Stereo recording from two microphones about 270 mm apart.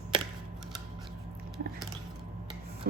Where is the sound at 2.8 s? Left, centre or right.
Right.